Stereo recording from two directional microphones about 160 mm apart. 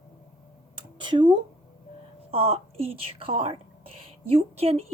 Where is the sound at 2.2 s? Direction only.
35° right (ahead or behind).